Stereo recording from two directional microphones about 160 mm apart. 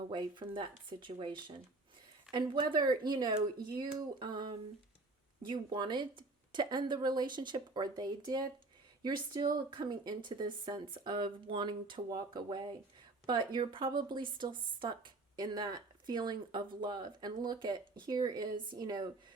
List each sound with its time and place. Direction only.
0.1 s speech: 30° right (ahead or behind)